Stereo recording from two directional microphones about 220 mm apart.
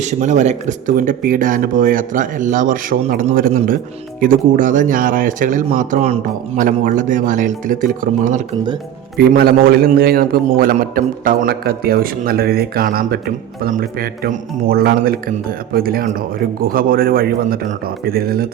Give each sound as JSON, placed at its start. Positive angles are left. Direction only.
{"t": 0.0, "sound": "a man's voice", "side_deg": -35}